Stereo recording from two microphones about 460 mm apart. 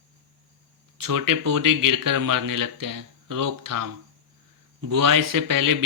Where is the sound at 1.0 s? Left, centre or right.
Right.